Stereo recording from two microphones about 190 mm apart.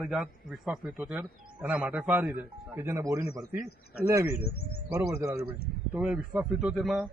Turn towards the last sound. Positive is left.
turn(degrees=0)  # may be behind; listen again after turning